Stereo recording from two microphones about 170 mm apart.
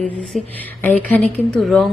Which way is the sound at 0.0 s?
10° left (ahead or behind).